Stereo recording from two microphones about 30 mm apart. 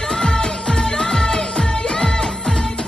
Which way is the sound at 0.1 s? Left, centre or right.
Left.